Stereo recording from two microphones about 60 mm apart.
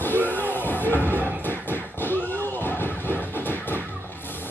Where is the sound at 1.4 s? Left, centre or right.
Left.